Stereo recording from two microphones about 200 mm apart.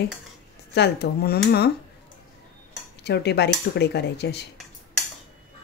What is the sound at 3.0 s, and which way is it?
Speech, 55° left (ahead or behind).